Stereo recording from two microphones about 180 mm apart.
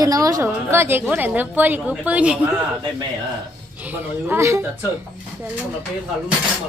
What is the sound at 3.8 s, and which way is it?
Speech, 10° right (ahead or behind).